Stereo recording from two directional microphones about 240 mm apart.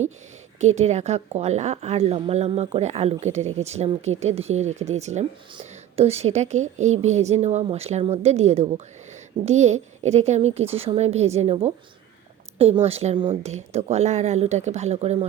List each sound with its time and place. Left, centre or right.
0.8 s a woman's voice: right